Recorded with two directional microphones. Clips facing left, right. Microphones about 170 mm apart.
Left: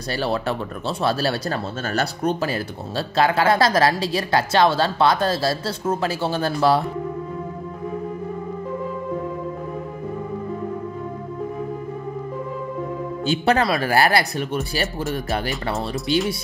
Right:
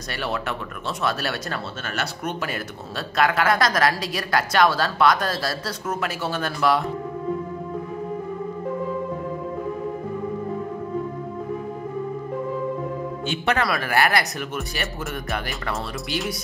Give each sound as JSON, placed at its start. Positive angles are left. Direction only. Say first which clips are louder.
{"t": 0.1, "sound": "speech", "louder": "left 5 dB", "side_deg": 35}
{"t": 13.2, "sound": "speech", "louder": "left 5 dB", "side_deg": 35}
{"t": 15.7, "sound": "speech", "louder": "left 7 dB", "side_deg": 0}